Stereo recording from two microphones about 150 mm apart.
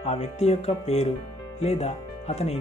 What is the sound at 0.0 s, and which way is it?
Speech, 45° left (ahead or behind).